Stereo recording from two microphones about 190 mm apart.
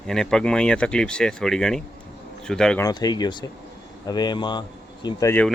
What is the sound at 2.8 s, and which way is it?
Speech, 20° left (ahead or behind).